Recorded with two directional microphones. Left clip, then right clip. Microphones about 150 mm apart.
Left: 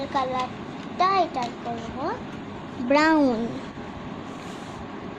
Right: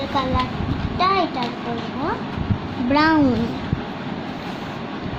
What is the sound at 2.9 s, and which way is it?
Speech, 50° left (ahead or behind).